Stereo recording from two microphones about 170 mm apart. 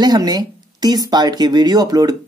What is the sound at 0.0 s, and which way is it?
Speech, 25° right (ahead or behind).